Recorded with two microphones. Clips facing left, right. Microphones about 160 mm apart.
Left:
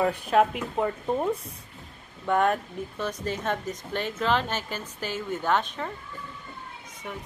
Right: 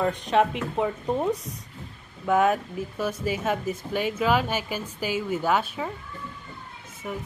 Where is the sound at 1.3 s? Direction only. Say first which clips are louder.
Right 2 dB; 25° left (ahead or behind).